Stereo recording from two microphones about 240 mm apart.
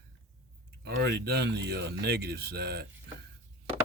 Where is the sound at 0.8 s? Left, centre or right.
Right.